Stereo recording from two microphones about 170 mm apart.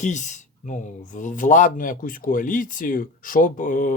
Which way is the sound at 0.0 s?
45° left (ahead or behind).